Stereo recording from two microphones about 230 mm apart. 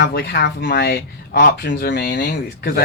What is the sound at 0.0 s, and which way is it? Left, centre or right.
Speech, left.